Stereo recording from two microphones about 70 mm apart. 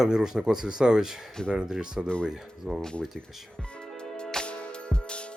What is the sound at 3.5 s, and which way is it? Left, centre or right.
Music, centre.